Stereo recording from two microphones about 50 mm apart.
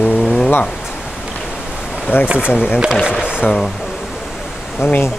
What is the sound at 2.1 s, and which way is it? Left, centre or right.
Speech, left.